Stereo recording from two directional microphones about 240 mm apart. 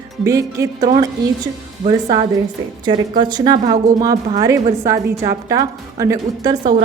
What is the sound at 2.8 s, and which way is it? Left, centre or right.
A woman's voice, centre.